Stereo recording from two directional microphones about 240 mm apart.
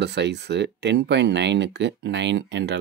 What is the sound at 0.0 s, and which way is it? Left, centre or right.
Speech, right.